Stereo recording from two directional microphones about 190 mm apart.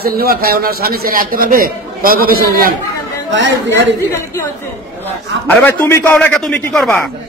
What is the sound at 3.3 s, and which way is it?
Speech, 70° right (ahead or behind).